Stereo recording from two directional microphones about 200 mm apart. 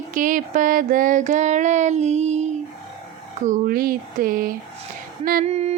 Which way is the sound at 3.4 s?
45° right (ahead or behind).